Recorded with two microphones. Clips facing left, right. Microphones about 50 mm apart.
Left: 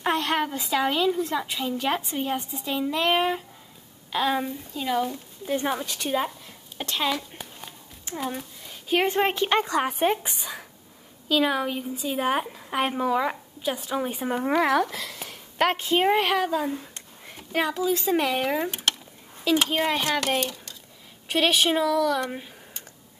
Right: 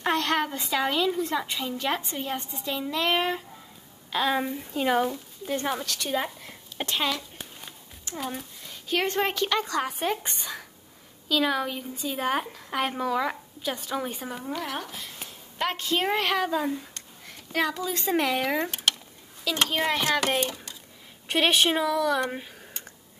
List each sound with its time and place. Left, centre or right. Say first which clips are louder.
0.0 s a woman's voice: left 1 dB; centre
4.7 s speech: right 2 dB; right
5.1 s a woman's voice: left 2 dB; centre
7.1 s a sound: left 3 dB; centre
9.2 s a woman's voice: left 3 dB; centre
10.2 s a woman's voice: left 1 dB; centre
14.3 s speech: left 9 dB; left
14.6 s speech: left 11 dB; left
15.7 s a woman's voice: left 3 dB; left; by 16.8 s centre
16.9 s a woman's voice: left 1 dB; centre